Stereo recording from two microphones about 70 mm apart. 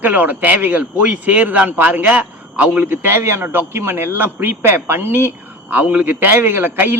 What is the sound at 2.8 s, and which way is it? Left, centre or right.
A man's voice, right.